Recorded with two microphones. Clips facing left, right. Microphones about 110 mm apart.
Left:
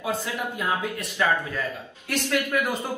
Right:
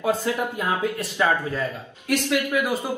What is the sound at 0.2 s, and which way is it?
Speech, 20° right (ahead or behind).